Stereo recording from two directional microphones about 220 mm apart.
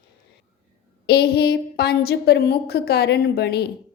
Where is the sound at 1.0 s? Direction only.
45° left (ahead or behind).